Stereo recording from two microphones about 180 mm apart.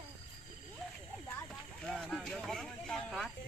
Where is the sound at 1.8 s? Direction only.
Centre (ahead or behind).